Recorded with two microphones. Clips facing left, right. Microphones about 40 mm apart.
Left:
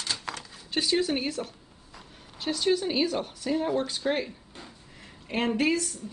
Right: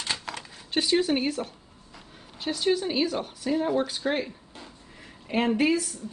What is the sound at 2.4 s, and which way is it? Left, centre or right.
A woman's voice, centre.